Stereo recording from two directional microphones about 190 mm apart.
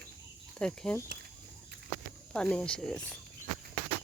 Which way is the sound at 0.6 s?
5° left (ahead or behind).